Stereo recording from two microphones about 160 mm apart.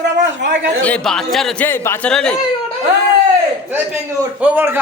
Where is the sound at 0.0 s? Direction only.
90° right.